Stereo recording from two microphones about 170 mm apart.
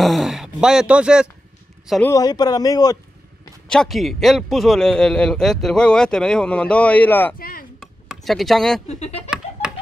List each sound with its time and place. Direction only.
0.0 s a man's voice: centre (ahead or behind)
2.0 s speech: 20° left (ahead or behind)
3.6 s a man's voice: 5° left (ahead or behind)
7.3 s speech: 60° left (ahead or behind)
7.8 s a sound: centre (ahead or behind)
8.8 s speech: 40° left (ahead or behind)